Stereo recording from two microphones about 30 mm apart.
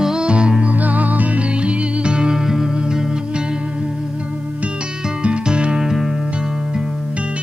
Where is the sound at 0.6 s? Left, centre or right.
Right.